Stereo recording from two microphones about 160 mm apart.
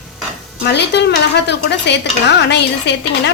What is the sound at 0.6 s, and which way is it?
A woman's voice, 90° left.